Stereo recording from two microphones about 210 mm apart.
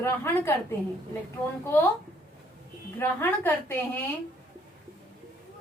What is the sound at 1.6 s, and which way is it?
Speech, 10° left (ahead or behind).